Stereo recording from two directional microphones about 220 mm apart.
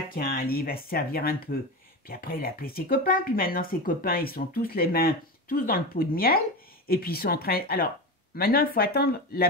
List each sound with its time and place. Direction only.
0.1 s speech: 40° left (ahead or behind)